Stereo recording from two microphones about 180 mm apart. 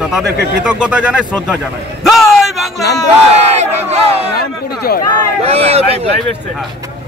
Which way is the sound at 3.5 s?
35° right (ahead or behind).